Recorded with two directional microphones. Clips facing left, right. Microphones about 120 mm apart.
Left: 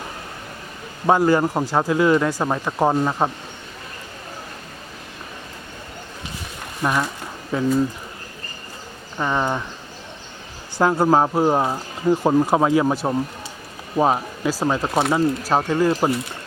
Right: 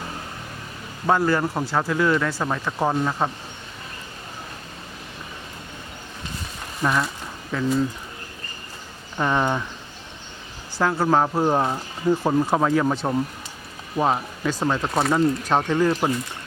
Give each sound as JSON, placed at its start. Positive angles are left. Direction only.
{"t": 1.0, "sound": "speech", "side_deg": 20}
{"t": 6.8, "sound": "speech", "side_deg": 10}
{"t": 9.1, "sound": "speech", "side_deg": 0}
{"t": 10.8, "sound": "speech", "side_deg": 20}
{"t": 11.4, "sound": "speech", "side_deg": 5}